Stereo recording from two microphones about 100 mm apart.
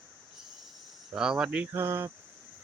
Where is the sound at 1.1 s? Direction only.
5° right (ahead or behind).